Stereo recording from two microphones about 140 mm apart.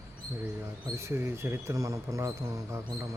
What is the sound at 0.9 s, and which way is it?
Speech, 20° right (ahead or behind).